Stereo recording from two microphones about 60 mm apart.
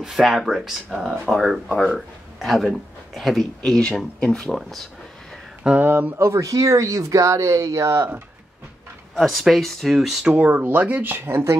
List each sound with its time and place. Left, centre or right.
0.0 s speech: centre
5.8 s speech: right
6.1 s speech: right
9.1 s speech: centre
10.3 s speech: right